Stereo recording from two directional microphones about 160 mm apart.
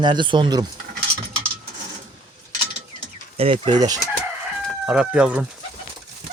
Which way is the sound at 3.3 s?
35° right (ahead or behind).